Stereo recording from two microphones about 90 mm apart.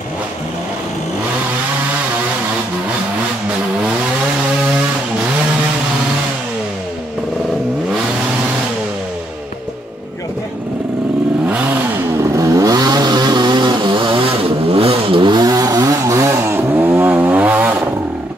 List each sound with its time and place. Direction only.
11.4 s vehicle: 15° right (ahead or behind)
12.4 s vehicle: 40° right (ahead or behind); by 14.2 s 70° right (ahead or behind)
14.7 s chainsaw: 90° right; by 17.7 s 20° right (ahead or behind)